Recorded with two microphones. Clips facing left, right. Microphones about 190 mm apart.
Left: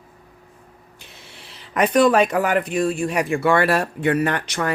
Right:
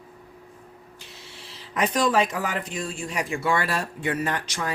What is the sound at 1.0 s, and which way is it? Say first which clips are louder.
Speech: left 2 dB; 60° left (ahead or behind).